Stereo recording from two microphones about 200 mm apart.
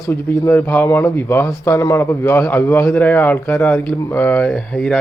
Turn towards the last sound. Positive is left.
turn(degrees=5)  # may be behind; listen again after turning